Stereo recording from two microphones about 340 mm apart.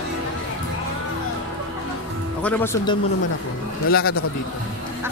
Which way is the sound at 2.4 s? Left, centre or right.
Centre.